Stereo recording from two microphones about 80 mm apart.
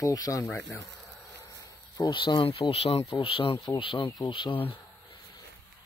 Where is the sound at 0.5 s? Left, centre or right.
Left.